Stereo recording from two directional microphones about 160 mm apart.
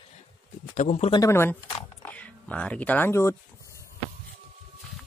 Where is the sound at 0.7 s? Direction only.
50° left (ahead or behind).